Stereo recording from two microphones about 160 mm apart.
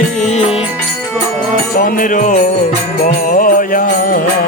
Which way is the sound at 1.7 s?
60° left (ahead or behind).